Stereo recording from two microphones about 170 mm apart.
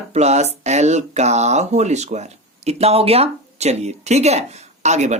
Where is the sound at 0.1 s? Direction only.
40° right (ahead or behind).